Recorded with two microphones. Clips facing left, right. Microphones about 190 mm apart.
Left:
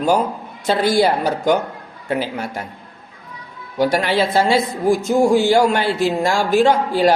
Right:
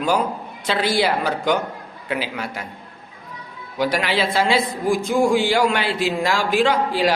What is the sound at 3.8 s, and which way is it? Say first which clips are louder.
A man's voice: left 4 dB; 45° left (ahead or behind).